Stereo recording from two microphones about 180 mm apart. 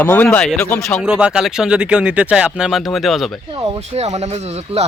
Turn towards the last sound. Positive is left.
turn(degrees=-35)  # may be behind; listen again after turning